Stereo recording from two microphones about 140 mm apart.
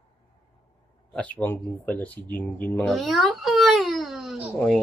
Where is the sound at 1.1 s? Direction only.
10° left (ahead or behind).